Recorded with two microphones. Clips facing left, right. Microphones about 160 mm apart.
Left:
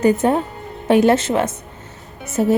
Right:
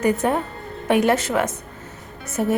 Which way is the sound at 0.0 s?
25° left (ahead or behind).